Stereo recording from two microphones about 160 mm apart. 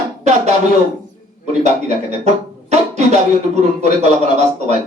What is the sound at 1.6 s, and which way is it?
Music, 45° right (ahead or behind).